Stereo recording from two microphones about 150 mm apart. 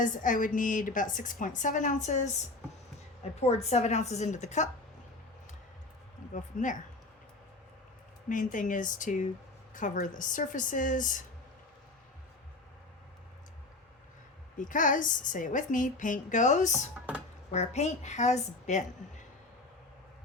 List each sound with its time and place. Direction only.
0.0 s a woman's voice: 60° left (ahead or behind)
6.3 s a woman's voice: 60° left (ahead or behind)
8.3 s a woman's voice: 60° left (ahead or behind)
14.6 s a woman's voice: 60° left (ahead or behind)